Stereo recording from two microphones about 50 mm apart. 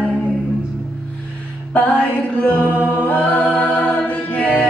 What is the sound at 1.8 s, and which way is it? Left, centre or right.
A capella, left.